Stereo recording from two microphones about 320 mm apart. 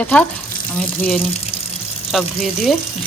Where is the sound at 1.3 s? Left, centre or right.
Centre.